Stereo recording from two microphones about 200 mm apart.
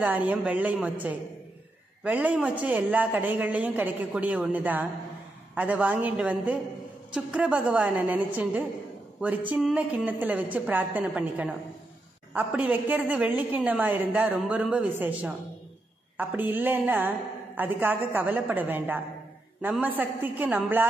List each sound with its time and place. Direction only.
0.0 s a woman's voice: 10° right (ahead or behind)